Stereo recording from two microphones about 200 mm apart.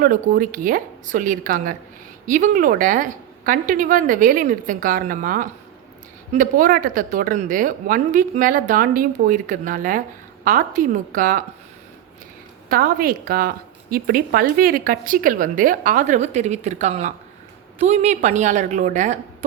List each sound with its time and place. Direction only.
0.0 s a woman's voice: 40° right (ahead or behind)
12.6 s a woman's voice: 45° right (ahead or behind)